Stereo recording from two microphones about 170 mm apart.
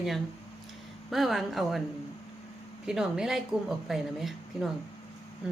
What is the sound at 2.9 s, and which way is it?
Speech, 5° right (ahead or behind).